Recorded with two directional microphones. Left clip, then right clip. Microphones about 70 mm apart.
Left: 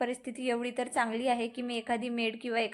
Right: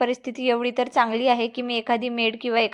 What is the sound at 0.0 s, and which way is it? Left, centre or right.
A woman's voice, right.